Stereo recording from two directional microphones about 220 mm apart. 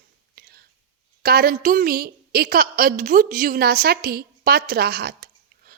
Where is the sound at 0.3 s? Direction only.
45° right (ahead or behind).